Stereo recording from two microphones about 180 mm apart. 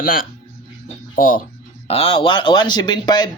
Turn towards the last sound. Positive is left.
turn(degrees=25)  # may be behind; listen again after turning